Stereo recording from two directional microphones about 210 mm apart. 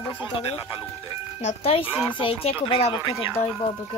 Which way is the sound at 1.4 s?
30° left (ahead or behind).